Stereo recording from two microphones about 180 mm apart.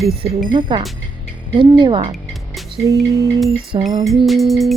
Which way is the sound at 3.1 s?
15° right (ahead or behind).